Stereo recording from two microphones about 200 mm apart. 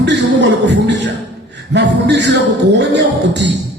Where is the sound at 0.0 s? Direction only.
60° right (ahead or behind).